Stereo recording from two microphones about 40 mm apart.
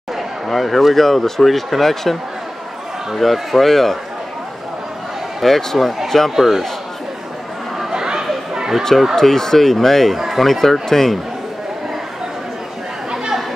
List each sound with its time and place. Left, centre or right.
0.5 s speech: centre
3.2 s speech: centre
5.4 s speech: centre
6.3 s a man's voice: centre
7.9 s chatter: centre
8.5 s a sound: centre
9.1 s speech: centre
10.1 s a sound: centre
10.4 s speech: centre
13.1 s chatter: centre